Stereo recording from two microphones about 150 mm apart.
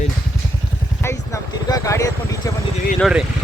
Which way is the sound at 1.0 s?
20° left (ahead or behind).